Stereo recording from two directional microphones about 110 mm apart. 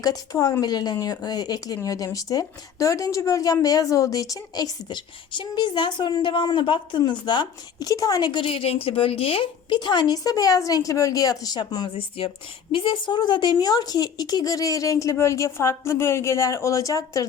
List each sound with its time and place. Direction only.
0.0 s a woman's voice: 35° left (ahead or behind)
11.9 s a woman's voice: 55° left (ahead or behind); by 17.2 s 30° left (ahead or behind)